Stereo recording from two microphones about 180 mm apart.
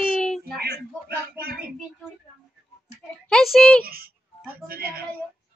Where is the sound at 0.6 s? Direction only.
60° right (ahead or behind).